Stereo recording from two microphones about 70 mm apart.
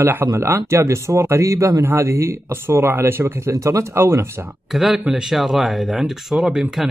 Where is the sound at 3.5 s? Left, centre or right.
Right.